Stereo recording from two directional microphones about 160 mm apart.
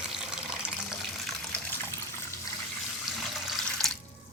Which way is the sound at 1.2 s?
10° left (ahead or behind).